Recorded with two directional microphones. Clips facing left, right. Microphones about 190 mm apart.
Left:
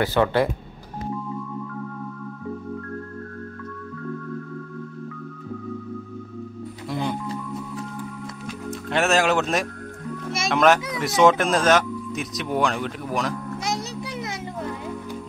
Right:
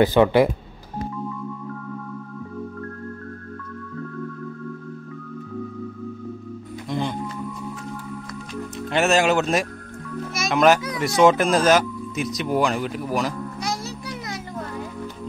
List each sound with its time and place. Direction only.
0.0 s speech: 15° right (ahead or behind)
6.9 s music: 5° left (ahead or behind)
8.9 s speech: centre (ahead or behind)
13.6 s music: 20° left (ahead or behind)